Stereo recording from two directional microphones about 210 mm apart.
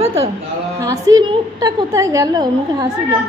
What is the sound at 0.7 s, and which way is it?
A woman's voice, 15° right (ahead or behind).